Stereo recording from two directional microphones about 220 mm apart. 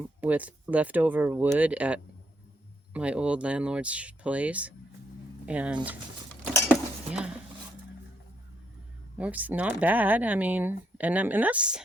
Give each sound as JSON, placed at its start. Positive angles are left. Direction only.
{"t": 0.2, "sound": "speech", "side_deg": -5}
{"t": 6.7, "sound": "cutlery", "side_deg": -5}
{"t": 9.1, "sound": "speech", "side_deg": -5}